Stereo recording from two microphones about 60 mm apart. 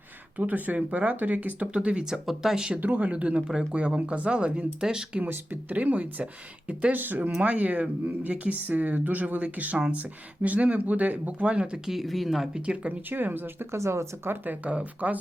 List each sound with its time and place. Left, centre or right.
0.3 s speech: right
2.2 s speech: centre
2.8 s speech: right
5.2 s speech: right
7.2 s speech: centre
7.4 s speech: right
11.9 s speech: centre
12.5 s speech: centre
13.1 s speech: right
13.7 s speech: right
14.3 s speech: right